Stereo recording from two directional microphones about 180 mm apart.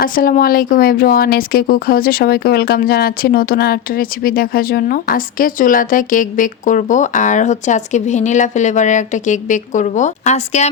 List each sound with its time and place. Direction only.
0.0 s speech: 50° left (ahead or behind)